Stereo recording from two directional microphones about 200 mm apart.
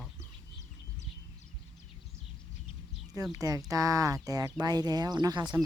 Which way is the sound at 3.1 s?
15° right (ahead or behind).